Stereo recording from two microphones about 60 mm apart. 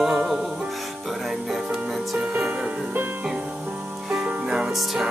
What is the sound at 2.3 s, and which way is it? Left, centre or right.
Music, centre.